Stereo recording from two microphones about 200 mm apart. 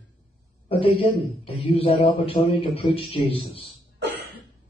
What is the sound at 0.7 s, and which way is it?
A man's voice, 30° left (ahead or behind).